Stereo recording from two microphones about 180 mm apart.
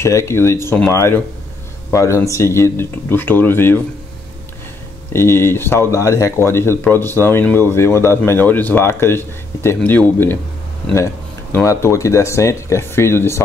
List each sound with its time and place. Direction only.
0.0 s speech: 15° left (ahead or behind)
5.1 s speech: 15° left (ahead or behind)
11.5 s speech: 15° left (ahead or behind)